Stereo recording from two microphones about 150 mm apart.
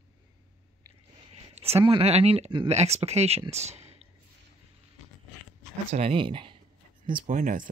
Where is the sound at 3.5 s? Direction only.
45° right (ahead or behind).